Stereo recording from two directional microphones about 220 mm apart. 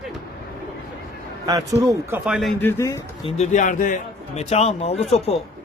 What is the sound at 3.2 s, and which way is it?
Speech, 30° left (ahead or behind).